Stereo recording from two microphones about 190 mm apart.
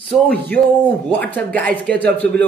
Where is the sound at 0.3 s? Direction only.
10° left (ahead or behind).